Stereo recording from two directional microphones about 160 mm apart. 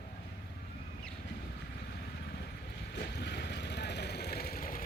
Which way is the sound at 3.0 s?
90° left.